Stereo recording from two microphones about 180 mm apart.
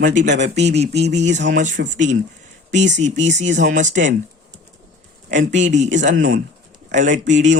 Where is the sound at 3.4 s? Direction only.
40° right (ahead or behind).